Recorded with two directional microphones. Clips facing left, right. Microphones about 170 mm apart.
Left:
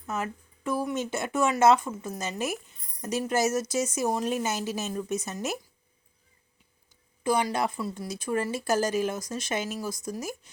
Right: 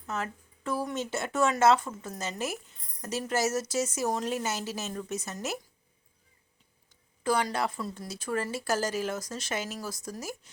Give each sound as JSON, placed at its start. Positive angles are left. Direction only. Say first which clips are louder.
{"t": 0.1, "sound": "speech", "louder": "left 2 dB", "side_deg": 10}
{"t": 7.3, "sound": "speech", "louder": "left 2 dB", "side_deg": 15}